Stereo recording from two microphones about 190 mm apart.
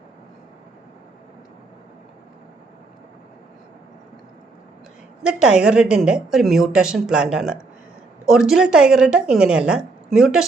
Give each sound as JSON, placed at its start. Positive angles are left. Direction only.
{"t": 5.2, "sound": "a woman's voice", "side_deg": -5}